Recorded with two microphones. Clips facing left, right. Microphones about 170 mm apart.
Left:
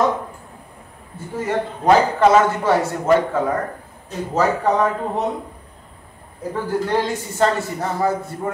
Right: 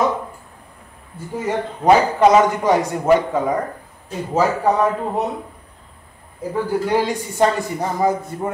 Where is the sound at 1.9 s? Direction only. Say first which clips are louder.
Right 1 dB; 15° right (ahead or behind).